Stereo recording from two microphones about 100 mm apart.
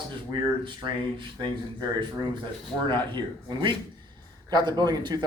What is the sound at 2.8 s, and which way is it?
Speech, 50° right (ahead or behind).